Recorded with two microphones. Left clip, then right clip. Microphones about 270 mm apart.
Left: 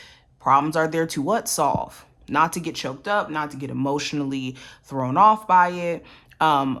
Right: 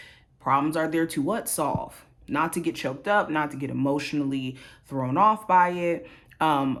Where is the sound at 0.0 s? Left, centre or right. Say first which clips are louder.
Left 6 dB; centre.